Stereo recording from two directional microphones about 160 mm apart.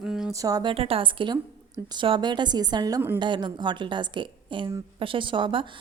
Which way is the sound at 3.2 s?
30° right (ahead or behind).